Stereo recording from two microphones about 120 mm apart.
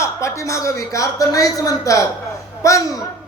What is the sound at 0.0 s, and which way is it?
A man's voice, 25° left (ahead or behind).